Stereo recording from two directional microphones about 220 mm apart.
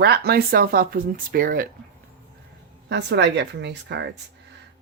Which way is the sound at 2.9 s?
50° right (ahead or behind).